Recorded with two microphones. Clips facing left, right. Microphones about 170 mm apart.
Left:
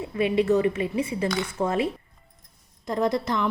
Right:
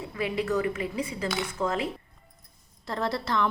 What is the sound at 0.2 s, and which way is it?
A woman's voice, 25° left (ahead or behind).